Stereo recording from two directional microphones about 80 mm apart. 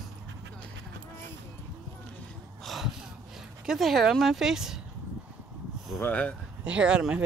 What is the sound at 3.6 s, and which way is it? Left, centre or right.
Speech, centre.